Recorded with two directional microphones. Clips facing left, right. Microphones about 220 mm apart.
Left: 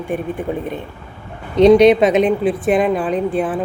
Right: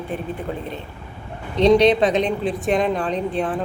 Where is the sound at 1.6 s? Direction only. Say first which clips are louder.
Left 5 dB; 10° left (ahead or behind).